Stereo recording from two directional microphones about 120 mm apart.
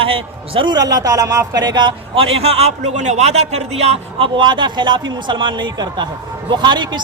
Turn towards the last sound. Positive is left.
turn(degrees=-40)  # may be behind; listen again after turning